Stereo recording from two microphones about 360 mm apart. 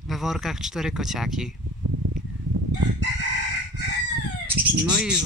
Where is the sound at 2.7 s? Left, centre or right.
Right.